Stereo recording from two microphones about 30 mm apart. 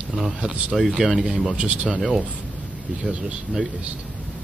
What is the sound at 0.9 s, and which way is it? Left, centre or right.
Speech, centre.